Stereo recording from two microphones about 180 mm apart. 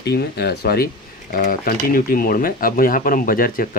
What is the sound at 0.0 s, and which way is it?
Speech, 65° left (ahead or behind).